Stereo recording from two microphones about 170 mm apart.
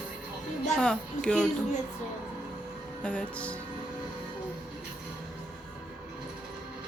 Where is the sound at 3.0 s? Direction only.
5° left (ahead or behind).